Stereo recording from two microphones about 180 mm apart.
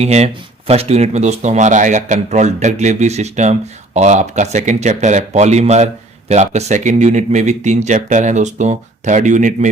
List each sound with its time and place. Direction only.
0.0 s speech: 35° right (ahead or behind)